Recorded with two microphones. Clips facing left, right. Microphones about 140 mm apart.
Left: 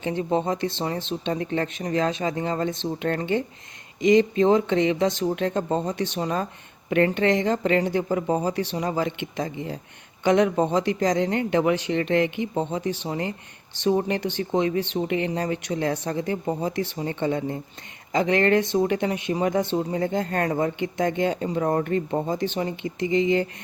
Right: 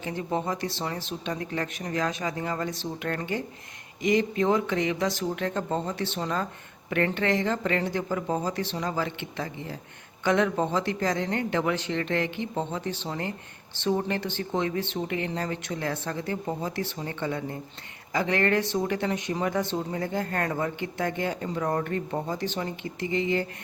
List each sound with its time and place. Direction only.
0.0 s speech: 25° left (ahead or behind)